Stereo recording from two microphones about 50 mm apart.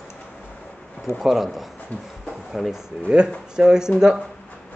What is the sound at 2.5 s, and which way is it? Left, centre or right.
Speech, centre.